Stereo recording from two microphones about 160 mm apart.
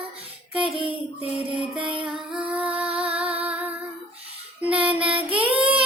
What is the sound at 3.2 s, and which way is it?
Music, 35° right (ahead or behind).